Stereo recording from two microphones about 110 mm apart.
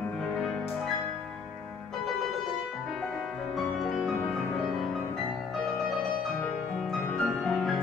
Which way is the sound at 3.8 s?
5° left (ahead or behind).